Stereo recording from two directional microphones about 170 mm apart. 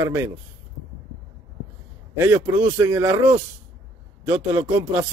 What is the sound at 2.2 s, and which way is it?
A man's voice, 20° right (ahead or behind).